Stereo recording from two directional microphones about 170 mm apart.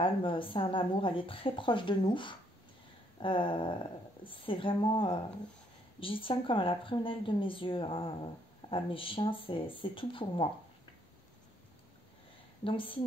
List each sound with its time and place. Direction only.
0.0 s speech: 30° left (ahead or behind)
12.6 s speech: 30° left (ahead or behind)